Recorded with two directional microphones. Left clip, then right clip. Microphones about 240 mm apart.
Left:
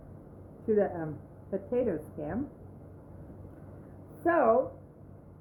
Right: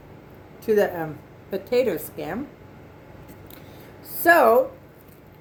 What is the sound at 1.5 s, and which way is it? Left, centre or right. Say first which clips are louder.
Speech: right 8 dB; right.